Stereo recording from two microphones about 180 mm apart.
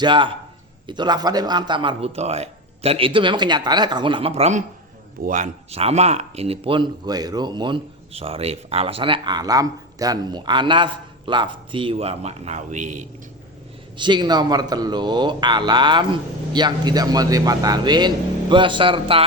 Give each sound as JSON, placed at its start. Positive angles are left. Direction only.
{"t": 0.0, "sound": "speech", "side_deg": -25}
{"t": 13.9, "sound": "speech", "side_deg": -25}